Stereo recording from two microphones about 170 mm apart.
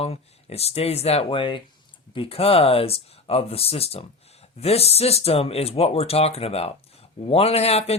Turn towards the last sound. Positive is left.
turn(degrees=35)  # may be behind; listen again after turning